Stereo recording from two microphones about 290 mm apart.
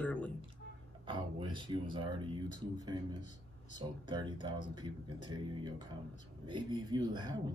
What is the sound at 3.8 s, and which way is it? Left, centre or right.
Speech, centre.